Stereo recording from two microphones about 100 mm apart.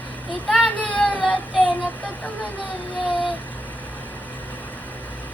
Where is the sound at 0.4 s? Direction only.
10° left (ahead or behind).